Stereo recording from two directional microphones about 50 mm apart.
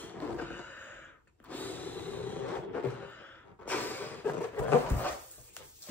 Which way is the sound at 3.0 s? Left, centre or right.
Left.